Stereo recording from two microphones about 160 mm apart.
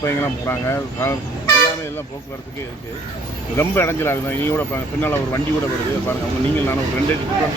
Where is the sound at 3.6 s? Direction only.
15° left (ahead or behind).